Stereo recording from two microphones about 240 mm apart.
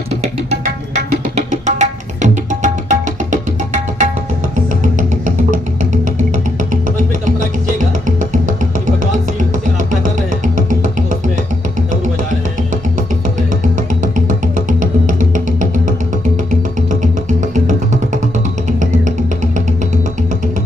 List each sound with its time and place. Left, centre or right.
0.1 s music: right
13.6 s music: right
18.7 s music: right